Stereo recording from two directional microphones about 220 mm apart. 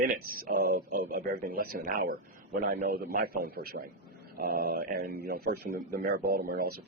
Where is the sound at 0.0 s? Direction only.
45° right (ahead or behind).